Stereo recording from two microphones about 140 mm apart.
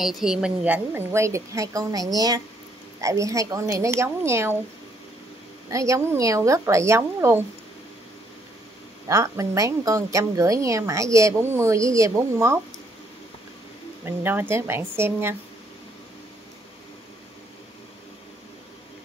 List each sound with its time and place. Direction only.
0.0 s a woman's voice: 5° right (ahead or behind); by 4.6 s 20° right (ahead or behind)
5.7 s a woman's voice: 20° right (ahead or behind)
9.0 s a woman's voice: 20° right (ahead or behind)
14.0 s speech: 15° right (ahead or behind)